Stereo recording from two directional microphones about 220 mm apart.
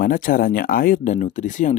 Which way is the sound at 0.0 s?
40° left (ahead or behind).